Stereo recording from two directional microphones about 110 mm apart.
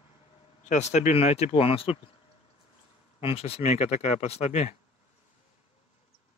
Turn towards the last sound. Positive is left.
turn(degrees=90)